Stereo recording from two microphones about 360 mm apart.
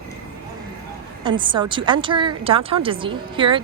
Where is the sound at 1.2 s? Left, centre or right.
Centre.